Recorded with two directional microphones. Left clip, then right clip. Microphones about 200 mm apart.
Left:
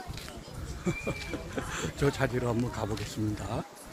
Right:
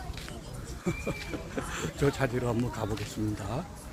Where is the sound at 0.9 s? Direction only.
15° left (ahead or behind).